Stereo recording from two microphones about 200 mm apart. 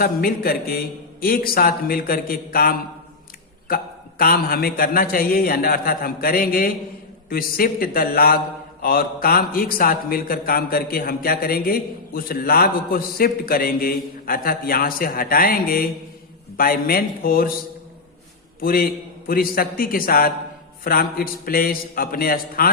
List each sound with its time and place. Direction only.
0.0 s a man's voice: 50° left (ahead or behind)
4.2 s a man's voice: 45° left (ahead or behind)
18.6 s a man's voice: 45° left (ahead or behind)